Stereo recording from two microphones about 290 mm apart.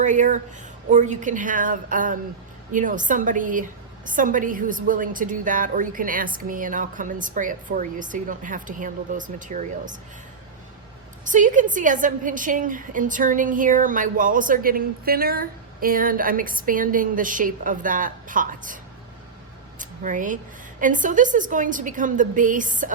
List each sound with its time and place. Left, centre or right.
0.0 s a woman's voice: right
11.3 s a woman's voice: right
19.8 s a woman's voice: right